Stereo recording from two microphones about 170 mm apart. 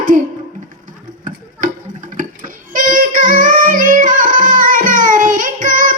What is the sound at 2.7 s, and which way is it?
Music, 50° right (ahead or behind).